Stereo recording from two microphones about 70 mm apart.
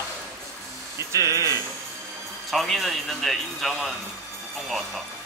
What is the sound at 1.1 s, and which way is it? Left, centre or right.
Speech, right.